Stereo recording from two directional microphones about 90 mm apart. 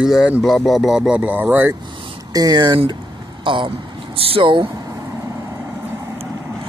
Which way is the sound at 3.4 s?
65° right (ahead or behind).